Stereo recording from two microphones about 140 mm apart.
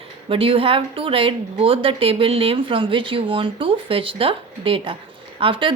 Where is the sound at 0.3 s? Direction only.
40° right (ahead or behind).